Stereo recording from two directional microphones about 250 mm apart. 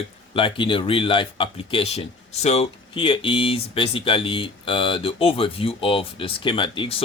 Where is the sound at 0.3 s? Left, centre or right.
Centre.